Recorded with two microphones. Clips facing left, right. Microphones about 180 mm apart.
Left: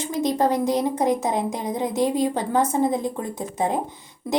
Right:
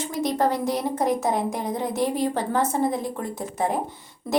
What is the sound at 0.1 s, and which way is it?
A woman's voice, 20° left (ahead or behind).